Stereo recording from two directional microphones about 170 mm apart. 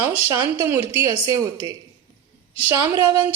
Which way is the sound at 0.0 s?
15° right (ahead or behind).